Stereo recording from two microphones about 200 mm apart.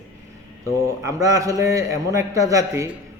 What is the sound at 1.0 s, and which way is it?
A man's voice, 15° right (ahead or behind).